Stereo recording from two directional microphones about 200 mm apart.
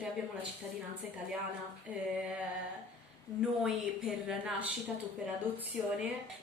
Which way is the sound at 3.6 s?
Centre (ahead or behind).